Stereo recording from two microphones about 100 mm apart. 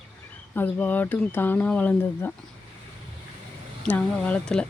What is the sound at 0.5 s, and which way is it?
Speech, 20° left (ahead or behind).